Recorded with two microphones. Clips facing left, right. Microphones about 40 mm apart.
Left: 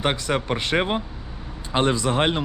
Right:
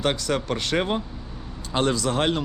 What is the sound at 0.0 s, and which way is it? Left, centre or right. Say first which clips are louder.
Speech: left 1 dB; left.